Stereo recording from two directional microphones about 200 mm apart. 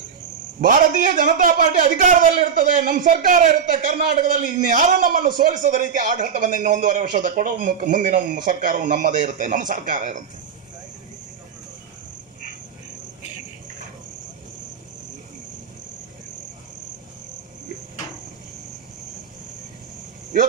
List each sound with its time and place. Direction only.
0.6 s a man's voice: 40° right (ahead or behind)